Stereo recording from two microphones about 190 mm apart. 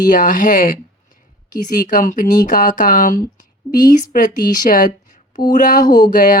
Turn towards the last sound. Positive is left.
turn(degrees=45)  # may be behind; listen again after turning